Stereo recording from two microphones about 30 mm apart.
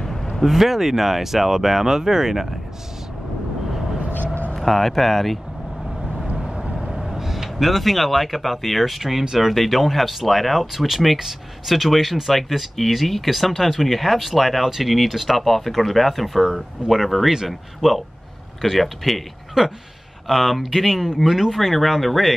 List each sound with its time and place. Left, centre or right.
0.4 s speech: centre
4.6 s speech: centre
7.2 s a sound: centre
7.5 s speech: centre
9.2 s speech: centre
9.5 s speech: centre
11.7 s speech: centre
14.6 s speech: centre
19.6 s speech: centre
20.2 s speech: centre